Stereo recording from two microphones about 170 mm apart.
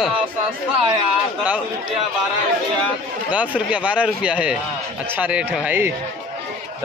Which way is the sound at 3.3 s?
10° right (ahead or behind).